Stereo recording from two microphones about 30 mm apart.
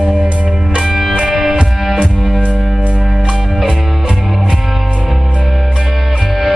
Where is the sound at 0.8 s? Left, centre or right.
Centre.